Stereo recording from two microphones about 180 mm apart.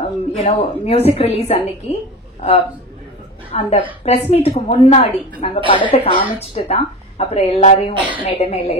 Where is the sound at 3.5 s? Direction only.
30° left (ahead or behind).